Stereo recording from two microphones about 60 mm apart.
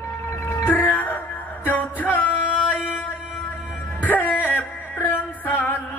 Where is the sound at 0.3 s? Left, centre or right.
Left.